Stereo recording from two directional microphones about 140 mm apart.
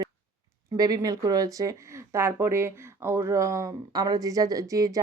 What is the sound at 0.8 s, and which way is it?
A woman's voice, 25° right (ahead or behind).